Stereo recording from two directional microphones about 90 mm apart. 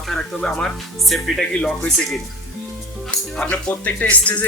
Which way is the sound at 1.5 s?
15° left (ahead or behind).